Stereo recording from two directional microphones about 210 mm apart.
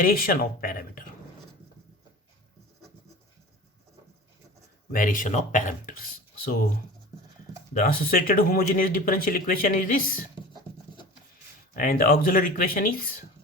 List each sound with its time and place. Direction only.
0.0 s speech: 40° left (ahead or behind)
4.9 s speech: 40° left (ahead or behind)
7.7 s speech: 40° left (ahead or behind)
11.7 s speech: 45° left (ahead or behind)